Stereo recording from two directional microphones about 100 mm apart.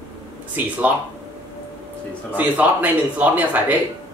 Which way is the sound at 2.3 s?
15° right (ahead or behind).